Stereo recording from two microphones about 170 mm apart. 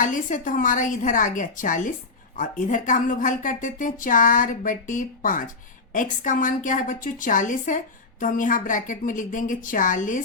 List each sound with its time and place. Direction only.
0.0 s a woman's voice: 50° left (ahead or behind)